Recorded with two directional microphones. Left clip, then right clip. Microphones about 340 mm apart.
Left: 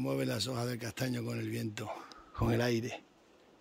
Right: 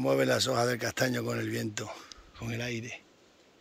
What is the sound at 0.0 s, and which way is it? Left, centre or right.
Speech, centre.